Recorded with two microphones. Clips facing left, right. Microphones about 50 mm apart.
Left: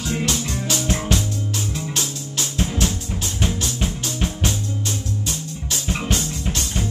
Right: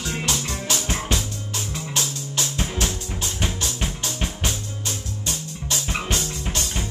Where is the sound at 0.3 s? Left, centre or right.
Centre.